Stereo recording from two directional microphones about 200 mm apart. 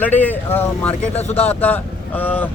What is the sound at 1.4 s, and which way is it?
Speech, 10° left (ahead or behind).